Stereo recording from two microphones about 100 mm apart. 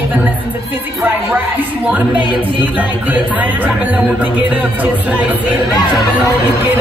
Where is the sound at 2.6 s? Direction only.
15° right (ahead or behind).